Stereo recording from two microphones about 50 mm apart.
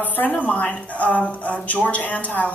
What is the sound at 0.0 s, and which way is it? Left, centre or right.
A man's voice, left.